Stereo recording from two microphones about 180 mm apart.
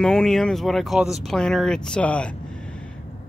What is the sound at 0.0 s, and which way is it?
Speech, 5° left (ahead or behind).